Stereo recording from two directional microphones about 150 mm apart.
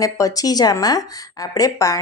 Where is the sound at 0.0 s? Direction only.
25° left (ahead or behind).